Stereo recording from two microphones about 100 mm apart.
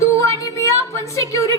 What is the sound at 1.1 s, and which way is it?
Speech, 30° left (ahead or behind).